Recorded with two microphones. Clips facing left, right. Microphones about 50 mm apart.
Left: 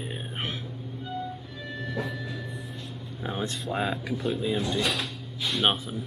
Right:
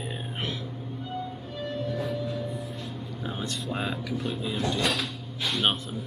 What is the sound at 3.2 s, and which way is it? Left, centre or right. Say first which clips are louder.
Air conditioning: left 3 dB; left.